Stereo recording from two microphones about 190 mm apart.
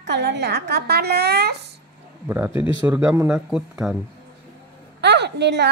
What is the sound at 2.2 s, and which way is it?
Speech, 10° right (ahead or behind).